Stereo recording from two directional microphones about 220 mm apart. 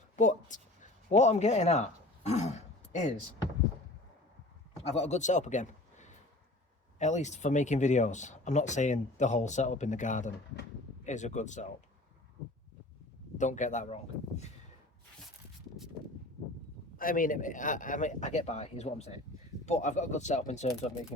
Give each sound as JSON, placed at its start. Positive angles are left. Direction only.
{"t": 0.2, "sound": "a sound", "side_deg": 35}
{"t": 4.9, "sound": "a man's voice", "side_deg": 30}
{"t": 13.4, "sound": "speech", "side_deg": 35}
{"t": 17.0, "sound": "speech", "side_deg": 40}